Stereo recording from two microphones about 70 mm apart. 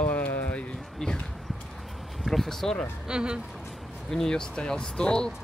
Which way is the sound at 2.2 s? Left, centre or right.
Centre.